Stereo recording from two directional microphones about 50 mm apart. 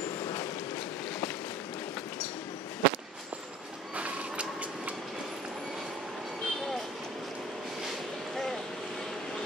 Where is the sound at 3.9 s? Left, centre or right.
Right.